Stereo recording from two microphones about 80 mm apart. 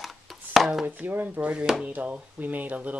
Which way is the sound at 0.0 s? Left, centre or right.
Centre.